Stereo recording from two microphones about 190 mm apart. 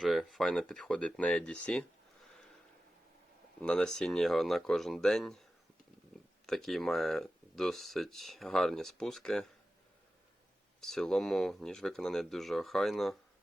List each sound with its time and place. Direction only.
0.0 s speech: centre (ahead or behind)
3.6 s speech: 5° left (ahead or behind)
6.4 s speech: centre (ahead or behind)
10.8 s speech: centre (ahead or behind)